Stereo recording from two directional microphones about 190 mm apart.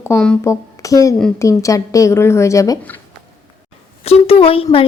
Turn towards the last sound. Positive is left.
turn(degrees=30)  # may be behind; listen again after turning